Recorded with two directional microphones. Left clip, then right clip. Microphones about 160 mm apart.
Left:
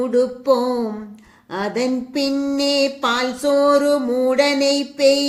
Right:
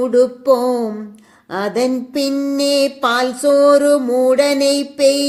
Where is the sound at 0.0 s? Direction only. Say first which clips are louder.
Right 4 dB; 35° right (ahead or behind).